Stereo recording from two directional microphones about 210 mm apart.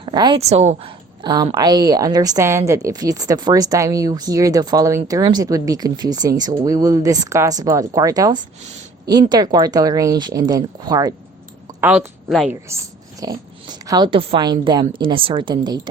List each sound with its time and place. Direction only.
0.0 s speech: 20° right (ahead or behind)
1.2 s a woman's voice: 20° right (ahead or behind)
11.8 s a woman's voice: 5° right (ahead or behind)
12.6 s speech: 15° right (ahead or behind)